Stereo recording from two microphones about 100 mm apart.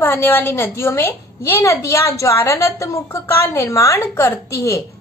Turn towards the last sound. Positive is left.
turn(degrees=30)  # may be behind; listen again after turning